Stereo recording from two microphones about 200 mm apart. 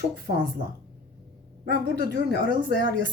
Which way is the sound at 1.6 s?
55° right (ahead or behind).